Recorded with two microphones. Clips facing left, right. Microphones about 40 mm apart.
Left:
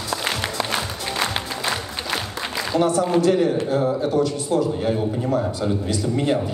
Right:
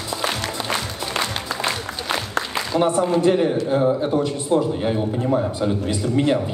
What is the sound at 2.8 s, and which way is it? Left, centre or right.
A man's voice, right.